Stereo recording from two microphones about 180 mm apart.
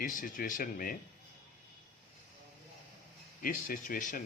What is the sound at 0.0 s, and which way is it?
Speech, 50° left (ahead or behind).